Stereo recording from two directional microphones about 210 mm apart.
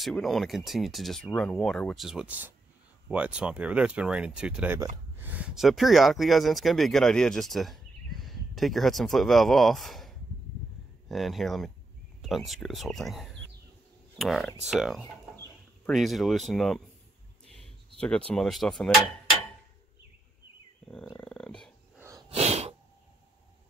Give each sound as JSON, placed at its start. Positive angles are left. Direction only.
{"t": 0.0, "sound": "speech", "side_deg": 0}
{"t": 18.0, "sound": "speech", "side_deg": 5}
{"t": 21.2, "sound": "dog", "side_deg": 5}
{"t": 22.3, "sound": "sneeze", "side_deg": -30}